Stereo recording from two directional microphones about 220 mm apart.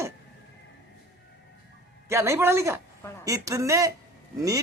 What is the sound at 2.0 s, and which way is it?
A man's voice, 15° right (ahead or behind).